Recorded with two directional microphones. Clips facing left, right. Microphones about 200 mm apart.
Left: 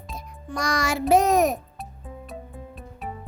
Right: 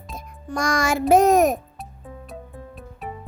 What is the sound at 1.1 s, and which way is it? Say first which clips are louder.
Speech: right 3 dB; 50° right (ahead or behind).